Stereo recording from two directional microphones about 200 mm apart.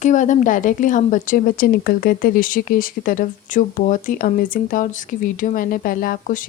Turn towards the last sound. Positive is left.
turn(degrees=45)  # may be behind; listen again after turning